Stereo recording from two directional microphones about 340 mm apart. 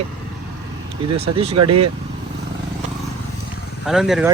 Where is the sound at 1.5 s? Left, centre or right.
Right.